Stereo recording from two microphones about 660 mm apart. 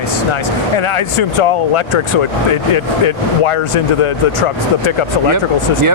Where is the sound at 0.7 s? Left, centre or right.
Left.